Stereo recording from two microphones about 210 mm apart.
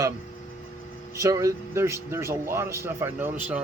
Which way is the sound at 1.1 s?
15° right (ahead or behind).